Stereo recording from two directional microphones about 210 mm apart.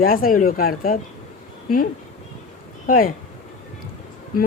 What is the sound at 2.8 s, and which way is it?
Speech, 40° left (ahead or behind).